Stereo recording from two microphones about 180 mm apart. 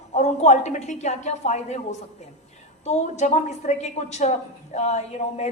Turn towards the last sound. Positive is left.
turn(degrees=35)  # may be behind; listen again after turning